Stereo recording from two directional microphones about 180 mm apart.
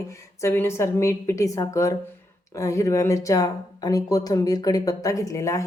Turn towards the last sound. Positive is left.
turn(degrees=15)  # may be behind; listen again after turning